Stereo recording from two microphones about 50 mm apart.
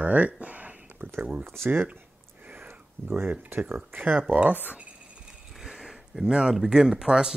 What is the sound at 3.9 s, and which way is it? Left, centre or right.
Speech, right.